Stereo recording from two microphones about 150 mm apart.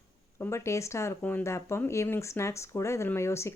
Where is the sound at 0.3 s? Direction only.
20° left (ahead or behind).